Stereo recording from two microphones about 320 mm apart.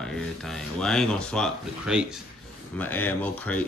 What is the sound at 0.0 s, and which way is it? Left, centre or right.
Speech, centre.